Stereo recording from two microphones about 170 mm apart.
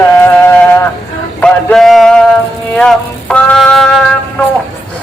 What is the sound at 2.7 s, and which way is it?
Music, 5° left (ahead or behind).